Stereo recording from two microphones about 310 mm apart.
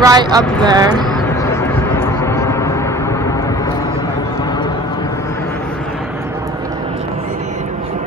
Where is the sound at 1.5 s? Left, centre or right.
Centre.